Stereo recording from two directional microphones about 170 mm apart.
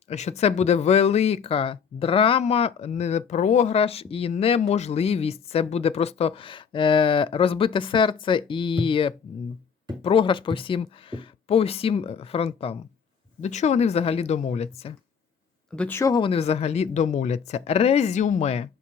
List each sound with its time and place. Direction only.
0.1 s speech: 40° left (ahead or behind)
15.7 s speech: 10° left (ahead or behind); by 18.7 s 40° left (ahead or behind)